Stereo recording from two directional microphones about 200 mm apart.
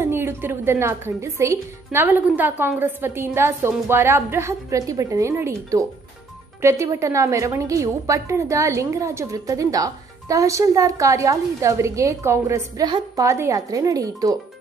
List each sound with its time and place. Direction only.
0.0 s a woman's voice: 10° right (ahead or behind)